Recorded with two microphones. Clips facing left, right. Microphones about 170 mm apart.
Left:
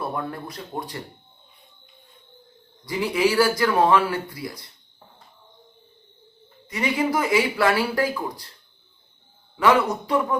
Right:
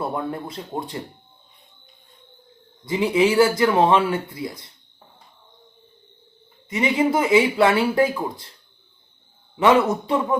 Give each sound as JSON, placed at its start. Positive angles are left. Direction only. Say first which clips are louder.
{"t": 0.0, "sound": "speech", "louder": "right 3 dB", "side_deg": -20}
{"t": 2.8, "sound": "speech", "louder": "right 3 dB", "side_deg": -20}
{"t": 6.7, "sound": "speech", "louder": "right 3 dB", "side_deg": -25}
{"t": 9.6, "sound": "speech", "louder": "right 3 dB", "side_deg": -25}